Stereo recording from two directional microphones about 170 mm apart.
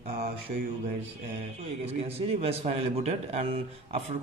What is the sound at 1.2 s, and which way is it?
A man's voice, 35° right (ahead or behind).